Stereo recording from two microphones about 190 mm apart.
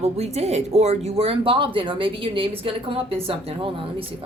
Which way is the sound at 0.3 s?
35° right (ahead or behind).